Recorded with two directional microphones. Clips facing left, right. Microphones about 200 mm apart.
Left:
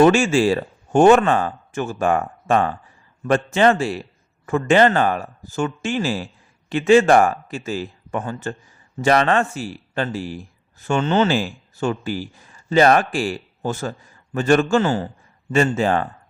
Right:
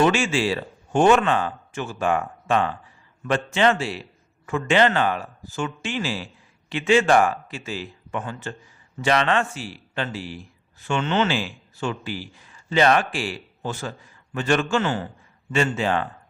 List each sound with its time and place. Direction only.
0.0 s a man's voice: 45° left (ahead or behind)